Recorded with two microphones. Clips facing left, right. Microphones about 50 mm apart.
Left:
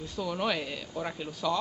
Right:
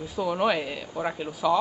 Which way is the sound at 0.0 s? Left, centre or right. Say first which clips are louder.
Right 6 dB; centre.